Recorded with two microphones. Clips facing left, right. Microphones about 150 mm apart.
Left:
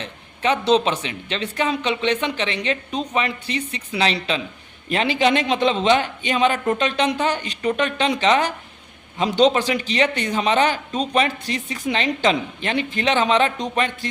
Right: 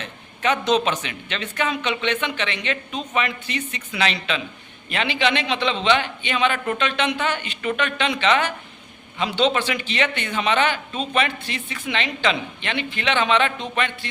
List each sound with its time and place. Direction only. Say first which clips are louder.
0.0 s a man's voice: left 1 dB; 30° left (ahead or behind)